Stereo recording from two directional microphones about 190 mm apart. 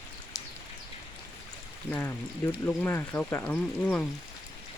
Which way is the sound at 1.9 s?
10° left (ahead or behind).